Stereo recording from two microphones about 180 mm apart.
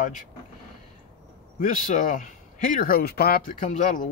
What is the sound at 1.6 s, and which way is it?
Speech, 50° left (ahead or behind).